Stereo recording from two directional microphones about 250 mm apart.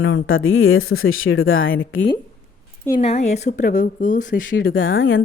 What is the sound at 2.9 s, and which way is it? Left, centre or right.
A woman's voice, left.